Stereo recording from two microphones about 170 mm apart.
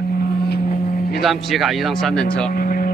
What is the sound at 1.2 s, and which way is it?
Speech, centre (ahead or behind).